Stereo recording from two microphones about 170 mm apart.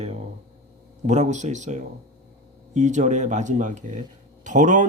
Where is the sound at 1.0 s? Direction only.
45° right (ahead or behind).